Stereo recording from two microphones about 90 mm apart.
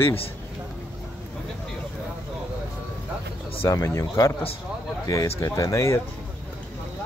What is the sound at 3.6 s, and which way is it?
Speech, 35° left (ahead or behind).